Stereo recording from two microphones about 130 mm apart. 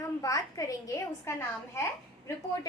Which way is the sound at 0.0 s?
25° left (ahead or behind).